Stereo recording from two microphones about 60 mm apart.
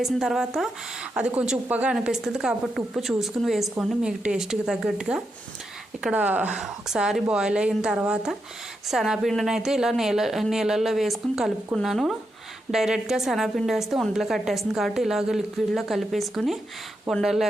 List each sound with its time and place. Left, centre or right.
0.0 s speech: centre
1.1 s a woman's voice: centre
4.0 s speech: centre
6.5 s a woman's voice: centre